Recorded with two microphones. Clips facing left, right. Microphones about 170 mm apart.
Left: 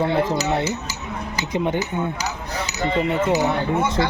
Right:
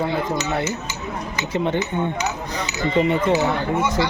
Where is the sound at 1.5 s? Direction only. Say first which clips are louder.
Right 1 dB; 10° left (ahead or behind).